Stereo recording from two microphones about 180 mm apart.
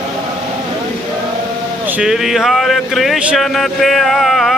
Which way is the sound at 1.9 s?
5° right (ahead or behind).